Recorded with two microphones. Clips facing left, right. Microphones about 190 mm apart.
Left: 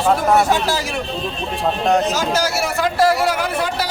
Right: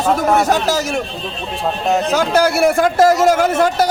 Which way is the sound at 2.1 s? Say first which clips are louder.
Right 5 dB; 55° right (ahead or behind).